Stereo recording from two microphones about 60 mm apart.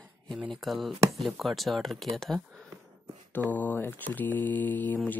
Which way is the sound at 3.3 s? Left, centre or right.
Left.